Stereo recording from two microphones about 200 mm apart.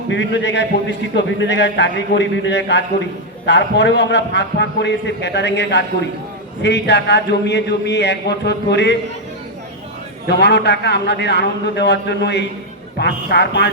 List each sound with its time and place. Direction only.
0.1 s a man's voice: 60° left (ahead or behind)
10.2 s a man's voice: 60° left (ahead or behind)